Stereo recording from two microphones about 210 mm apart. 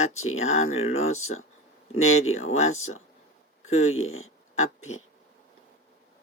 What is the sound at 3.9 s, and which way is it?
Speech, 75° left (ahead or behind).